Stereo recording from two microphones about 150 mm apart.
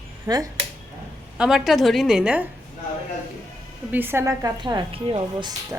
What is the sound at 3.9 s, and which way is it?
A woman's voice, 15° right (ahead or behind).